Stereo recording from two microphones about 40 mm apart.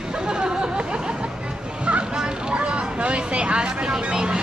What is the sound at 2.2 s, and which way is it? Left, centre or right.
Speech, right.